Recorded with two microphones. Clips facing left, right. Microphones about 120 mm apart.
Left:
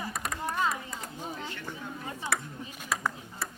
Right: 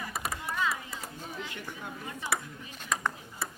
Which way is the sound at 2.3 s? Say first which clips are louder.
Even; 5° right (ahead or behind).